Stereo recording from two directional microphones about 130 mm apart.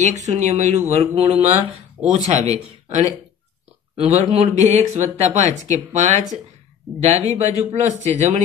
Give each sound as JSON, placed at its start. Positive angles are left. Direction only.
{"t": 0.0, "sound": "speech", "side_deg": -60}